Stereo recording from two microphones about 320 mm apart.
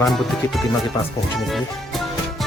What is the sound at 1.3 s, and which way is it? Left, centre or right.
Music, centre.